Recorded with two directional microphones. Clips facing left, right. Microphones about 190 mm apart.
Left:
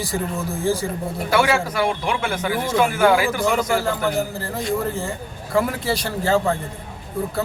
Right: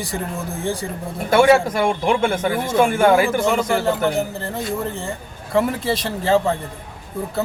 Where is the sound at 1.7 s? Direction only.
50° right (ahead or behind).